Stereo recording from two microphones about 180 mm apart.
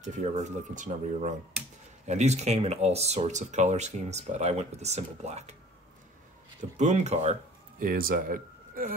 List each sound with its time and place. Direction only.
0.0 s speech: 40° right (ahead or behind)
6.8 s speech: 40° right (ahead or behind)
7.8 s speech: 55° right (ahead or behind)